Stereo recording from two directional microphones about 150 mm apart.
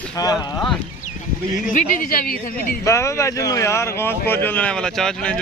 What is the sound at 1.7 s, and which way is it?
A woman's voice, 70° left (ahead or behind).